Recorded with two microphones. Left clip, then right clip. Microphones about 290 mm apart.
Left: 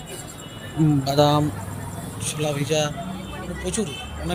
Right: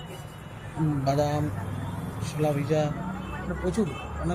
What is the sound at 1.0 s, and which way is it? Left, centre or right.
Speech, left.